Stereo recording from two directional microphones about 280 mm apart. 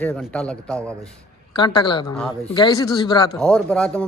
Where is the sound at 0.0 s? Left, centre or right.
Centre.